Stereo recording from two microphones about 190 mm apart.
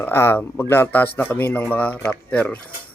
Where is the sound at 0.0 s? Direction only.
10° left (ahead or behind).